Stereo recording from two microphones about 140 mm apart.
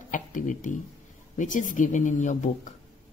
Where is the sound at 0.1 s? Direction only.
70° left (ahead or behind).